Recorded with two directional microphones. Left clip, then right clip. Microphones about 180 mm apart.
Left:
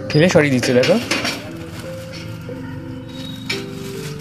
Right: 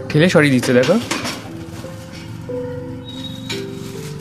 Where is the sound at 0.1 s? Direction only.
20° right (ahead or behind).